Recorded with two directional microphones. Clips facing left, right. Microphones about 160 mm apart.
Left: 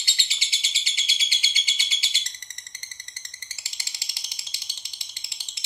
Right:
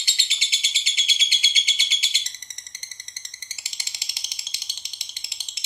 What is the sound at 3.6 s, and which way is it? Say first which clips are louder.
Ratchet: right 2 dB; 20° right (ahead or behind).